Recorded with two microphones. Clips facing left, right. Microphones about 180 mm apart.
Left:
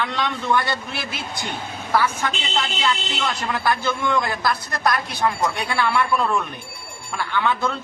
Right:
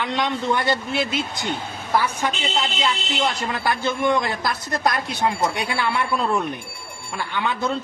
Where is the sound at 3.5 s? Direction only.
20° right (ahead or behind).